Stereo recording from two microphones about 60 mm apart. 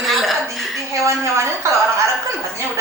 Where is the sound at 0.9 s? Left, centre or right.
Right.